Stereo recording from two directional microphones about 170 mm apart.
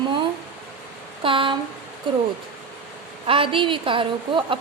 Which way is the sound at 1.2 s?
30° right (ahead or behind).